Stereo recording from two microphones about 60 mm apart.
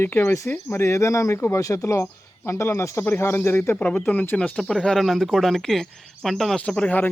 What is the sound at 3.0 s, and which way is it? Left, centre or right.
Speech, left.